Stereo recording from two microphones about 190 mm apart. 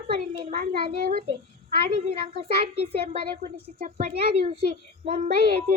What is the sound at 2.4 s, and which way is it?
A woman's voice, 35° right (ahead or behind).